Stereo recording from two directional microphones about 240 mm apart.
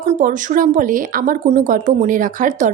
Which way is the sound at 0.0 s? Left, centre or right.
Right.